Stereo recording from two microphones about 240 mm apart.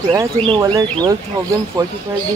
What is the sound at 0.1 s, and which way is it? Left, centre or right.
Speech, centre.